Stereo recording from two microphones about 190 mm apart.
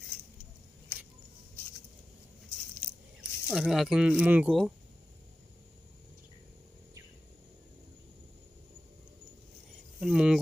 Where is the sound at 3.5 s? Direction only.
5° right (ahead or behind).